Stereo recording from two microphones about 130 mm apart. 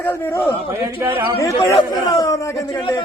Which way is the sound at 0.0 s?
15° left (ahead or behind).